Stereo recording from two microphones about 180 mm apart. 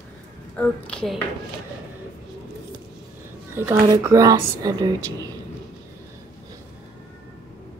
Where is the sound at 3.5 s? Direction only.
15° right (ahead or behind).